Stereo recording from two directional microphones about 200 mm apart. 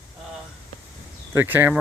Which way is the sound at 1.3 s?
10° right (ahead or behind).